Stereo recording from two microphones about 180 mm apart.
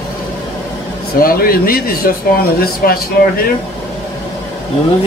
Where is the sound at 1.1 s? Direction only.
55° left (ahead or behind).